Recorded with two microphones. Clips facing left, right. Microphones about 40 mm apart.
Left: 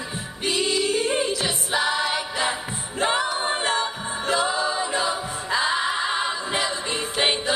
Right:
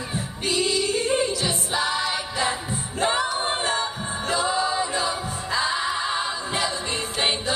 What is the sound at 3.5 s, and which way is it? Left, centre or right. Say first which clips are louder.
A capella: left 1 dB; left.